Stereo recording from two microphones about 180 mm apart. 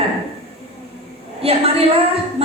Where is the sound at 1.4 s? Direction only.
35° right (ahead or behind).